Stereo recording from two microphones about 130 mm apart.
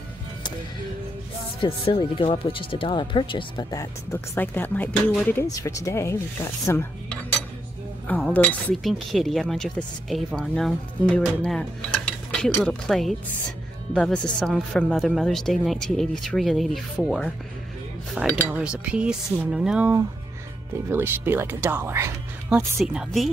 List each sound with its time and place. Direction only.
1.6 s speech: 40° left (ahead or behind)
3.7 s speech: 20° left (ahead or behind)
5.5 s speech: 25° left (ahead or behind)
8.1 s speech: 10° left (ahead or behind)
8.8 s speech: centre (ahead or behind)
12.6 s speech: centre (ahead or behind)
20.9 s speech: 15° right (ahead or behind)
22.8 s speech: centre (ahead or behind)